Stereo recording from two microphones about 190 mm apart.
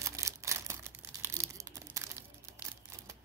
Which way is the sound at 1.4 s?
15° right (ahead or behind).